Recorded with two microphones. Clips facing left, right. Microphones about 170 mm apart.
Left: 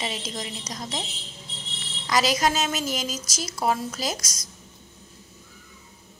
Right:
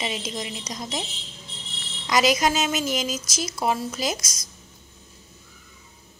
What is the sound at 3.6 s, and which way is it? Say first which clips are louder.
Speech: even; 10° right (ahead or behind).